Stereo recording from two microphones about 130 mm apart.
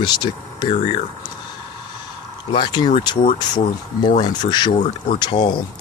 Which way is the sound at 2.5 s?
35° left (ahead or behind).